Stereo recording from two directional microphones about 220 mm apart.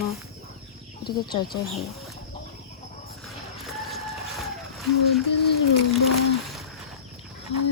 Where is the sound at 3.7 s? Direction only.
Centre (ahead or behind).